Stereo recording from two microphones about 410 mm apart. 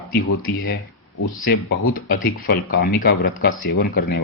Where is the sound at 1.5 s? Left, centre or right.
Left.